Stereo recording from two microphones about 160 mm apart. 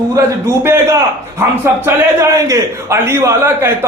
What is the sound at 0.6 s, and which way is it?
A man's voice, 15° right (ahead or behind).